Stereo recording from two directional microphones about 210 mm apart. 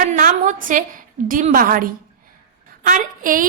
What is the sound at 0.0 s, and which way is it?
A woman's voice, 40° right (ahead or behind).